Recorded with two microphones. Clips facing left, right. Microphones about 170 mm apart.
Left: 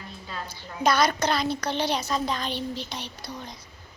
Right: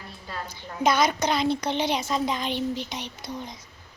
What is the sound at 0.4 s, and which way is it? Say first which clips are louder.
A child's voice: right 1 dB; 20° right (ahead or behind).